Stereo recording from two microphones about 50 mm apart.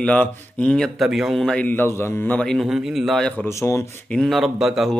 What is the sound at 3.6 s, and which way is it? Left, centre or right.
Speech, left.